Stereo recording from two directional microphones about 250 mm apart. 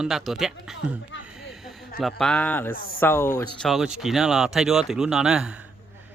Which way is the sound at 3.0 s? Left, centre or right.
Centre.